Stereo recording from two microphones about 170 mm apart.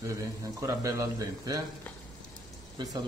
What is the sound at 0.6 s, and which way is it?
Speech, 20° right (ahead or behind).